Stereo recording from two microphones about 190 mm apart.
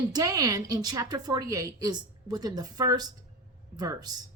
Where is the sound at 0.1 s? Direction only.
20° right (ahead or behind).